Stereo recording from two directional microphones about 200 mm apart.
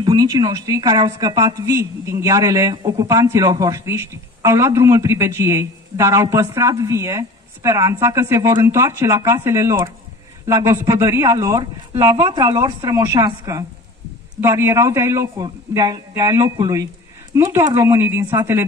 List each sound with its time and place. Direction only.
0.0 s a woman's voice: 20° right (ahead or behind)